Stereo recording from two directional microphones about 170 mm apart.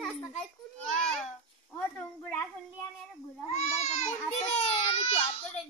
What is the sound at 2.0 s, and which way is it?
Speech, 10° left (ahead or behind).